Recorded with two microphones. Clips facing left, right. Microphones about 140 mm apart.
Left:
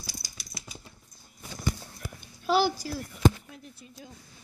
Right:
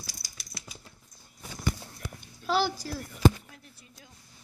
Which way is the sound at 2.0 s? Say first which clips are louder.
Left 3 dB; 10° left (ahead or behind).